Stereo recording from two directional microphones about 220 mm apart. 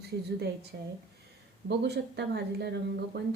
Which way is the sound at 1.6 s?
50° right (ahead or behind).